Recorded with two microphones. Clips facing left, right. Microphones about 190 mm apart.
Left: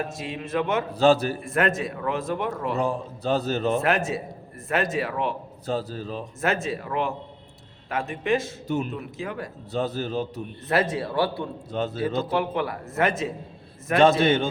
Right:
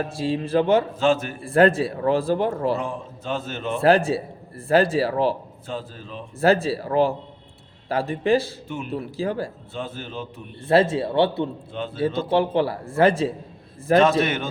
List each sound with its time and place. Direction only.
0.0 s a man's voice: 30° right (ahead or behind)
0.9 s a man's voice: 35° left (ahead or behind)
1.4 s a man's voice: 30° right (ahead or behind)
2.7 s a man's voice: 40° left (ahead or behind)
3.8 s a man's voice: 30° right (ahead or behind)
5.6 s a man's voice: 40° left (ahead or behind)
6.4 s a man's voice: 35° right (ahead or behind)
8.6 s a man's voice: 40° left (ahead or behind)
8.9 s a man's voice: 30° right (ahead or behind)
9.7 s a man's voice: 40° left (ahead or behind)
10.7 s a man's voice: 25° right (ahead or behind)
11.7 s a man's voice: 40° left (ahead or behind)
12.3 s a man's voice: 30° right (ahead or behind)
14.2 s a man's voice: 30° left (ahead or behind)